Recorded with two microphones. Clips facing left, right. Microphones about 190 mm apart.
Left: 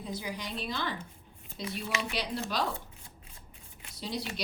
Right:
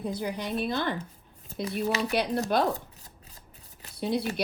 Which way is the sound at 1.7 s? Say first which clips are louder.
Right 8 dB; 40° right (ahead or behind).